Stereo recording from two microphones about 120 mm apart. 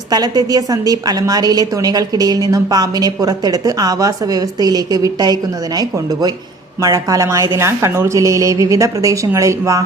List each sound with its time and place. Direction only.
0.1 s a woman's voice: 35° right (ahead or behind)
6.8 s a woman's voice: 30° right (ahead or behind)